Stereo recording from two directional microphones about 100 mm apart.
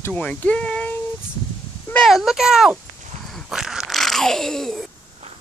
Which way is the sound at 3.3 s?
5° right (ahead or behind).